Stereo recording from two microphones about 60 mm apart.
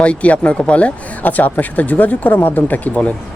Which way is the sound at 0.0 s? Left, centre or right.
Left.